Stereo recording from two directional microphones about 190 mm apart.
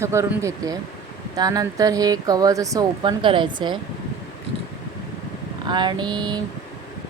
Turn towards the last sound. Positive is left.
turn(degrees=-20)  # may be behind; listen again after turning